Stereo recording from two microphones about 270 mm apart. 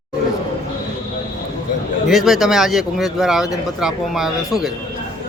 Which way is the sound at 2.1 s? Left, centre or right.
Centre.